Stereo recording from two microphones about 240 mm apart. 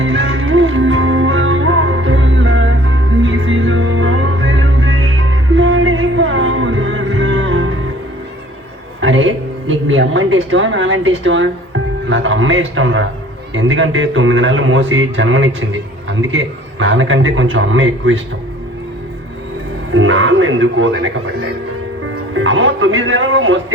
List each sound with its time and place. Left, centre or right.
0.0 s music: right
9.0 s a sound: right
12.0 s a man's voice: right
19.9 s a man's voice: right
22.4 s a man's voice: right